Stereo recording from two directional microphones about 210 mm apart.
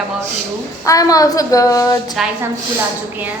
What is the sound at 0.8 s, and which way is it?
A woman's voice, 15° left (ahead or behind).